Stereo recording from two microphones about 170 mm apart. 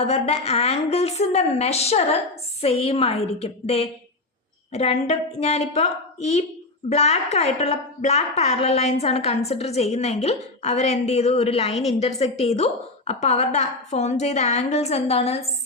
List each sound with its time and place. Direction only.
0.0 s a woman's voice: 40° left (ahead or behind)